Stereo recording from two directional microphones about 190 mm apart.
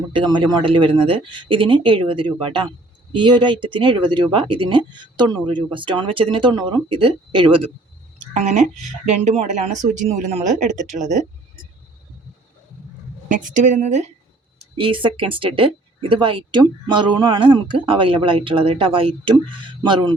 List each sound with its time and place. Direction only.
0.1 s speech: 25° right (ahead or behind)
8.3 s speech: 40° right (ahead or behind)
13.2 s speech: 40° right (ahead or behind); by 20.1 s 25° right (ahead or behind)